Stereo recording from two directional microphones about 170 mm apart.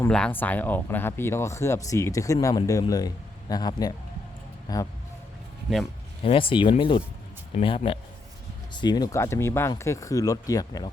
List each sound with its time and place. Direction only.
0.1 s speech: 10° left (ahead or behind)
6.2 s speech: 30° left (ahead or behind)